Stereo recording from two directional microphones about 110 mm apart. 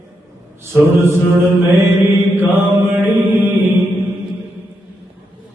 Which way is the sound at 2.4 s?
15° right (ahead or behind).